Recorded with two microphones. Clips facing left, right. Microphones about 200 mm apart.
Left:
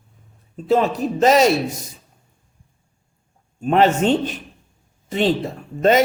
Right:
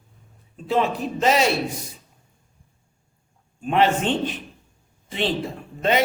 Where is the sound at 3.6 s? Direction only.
40° left (ahead or behind).